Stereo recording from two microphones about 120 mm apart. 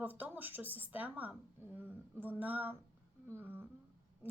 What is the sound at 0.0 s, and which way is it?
Speech, 15° right (ahead or behind).